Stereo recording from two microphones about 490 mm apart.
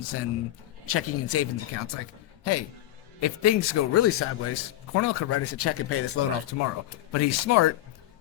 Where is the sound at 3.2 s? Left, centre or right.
Left.